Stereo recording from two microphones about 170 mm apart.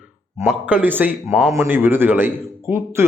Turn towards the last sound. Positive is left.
turn(degrees=-15)  # may be behind; listen again after turning